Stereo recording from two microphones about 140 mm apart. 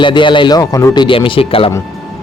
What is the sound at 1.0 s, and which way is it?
Speech, 40° left (ahead or behind).